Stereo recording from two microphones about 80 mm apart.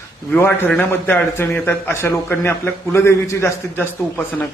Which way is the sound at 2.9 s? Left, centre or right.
Left.